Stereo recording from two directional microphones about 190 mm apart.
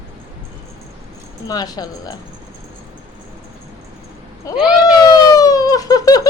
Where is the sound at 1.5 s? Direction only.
20° left (ahead or behind).